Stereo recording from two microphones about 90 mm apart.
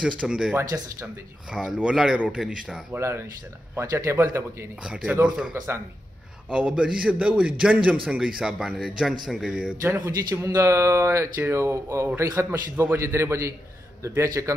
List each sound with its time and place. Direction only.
0.2 s a man's voice: 10° right (ahead or behind)
3.0 s speech: 30° right (ahead or behind)
5.0 s a man's voice: 15° right (ahead or behind)
6.5 s a man's voice: 10° right (ahead or behind)
9.8 s a man's voice: 25° right (ahead or behind)
12.4 s a man's voice: 20° right (ahead or behind)